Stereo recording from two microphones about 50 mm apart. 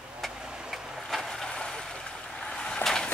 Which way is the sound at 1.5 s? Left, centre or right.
Centre.